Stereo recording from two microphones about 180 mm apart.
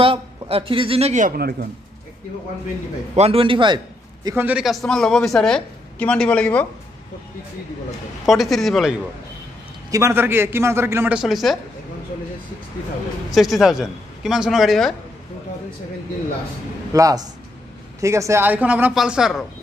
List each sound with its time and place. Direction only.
0.0 s a man's voice: 30° right (ahead or behind); by 1.7 s 55° right (ahead or behind)
3.2 s a man's voice: 30° right (ahead or behind); by 6.7 s 10° left (ahead or behind)
8.3 s a man's voice: centre (ahead or behind)
9.8 s speech: 15° right (ahead or behind); by 11.5 s centre (ahead or behind)
13.3 s a man's voice: centre (ahead or behind)
16.9 s speech: 20° right (ahead or behind); by 19.4 s 5° right (ahead or behind)